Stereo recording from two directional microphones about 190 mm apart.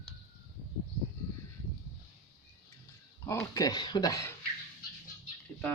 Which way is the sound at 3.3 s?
15° left (ahead or behind).